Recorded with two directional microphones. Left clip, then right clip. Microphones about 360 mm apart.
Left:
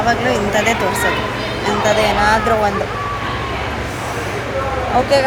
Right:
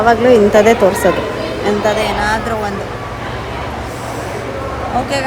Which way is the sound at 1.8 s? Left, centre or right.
Centre.